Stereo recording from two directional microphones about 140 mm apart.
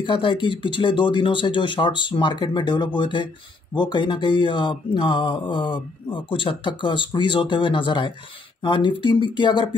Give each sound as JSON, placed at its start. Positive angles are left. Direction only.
{"t": 0.0, "sound": "speech", "side_deg": 35}